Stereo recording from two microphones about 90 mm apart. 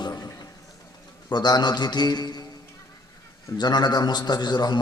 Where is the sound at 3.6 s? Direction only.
50° left (ahead or behind).